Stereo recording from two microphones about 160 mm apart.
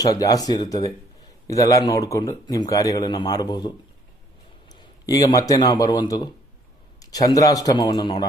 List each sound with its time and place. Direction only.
0.0 s speech: 20° left (ahead or behind)
4.8 s a man's voice: 25° left (ahead or behind)